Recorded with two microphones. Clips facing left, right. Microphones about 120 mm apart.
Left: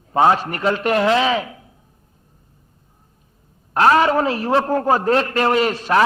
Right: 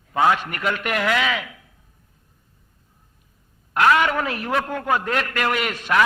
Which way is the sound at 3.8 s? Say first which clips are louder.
Left 4 dB; 35° left (ahead or behind).